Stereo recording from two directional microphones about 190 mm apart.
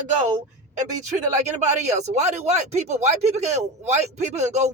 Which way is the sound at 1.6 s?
35° right (ahead or behind).